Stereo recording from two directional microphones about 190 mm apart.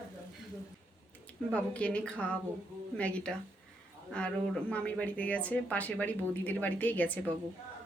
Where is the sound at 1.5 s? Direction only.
5° left (ahead or behind).